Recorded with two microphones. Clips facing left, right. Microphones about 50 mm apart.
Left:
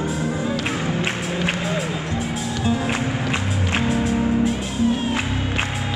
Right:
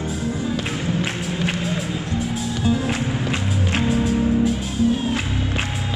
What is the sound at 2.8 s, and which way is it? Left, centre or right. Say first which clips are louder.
Music: even; left.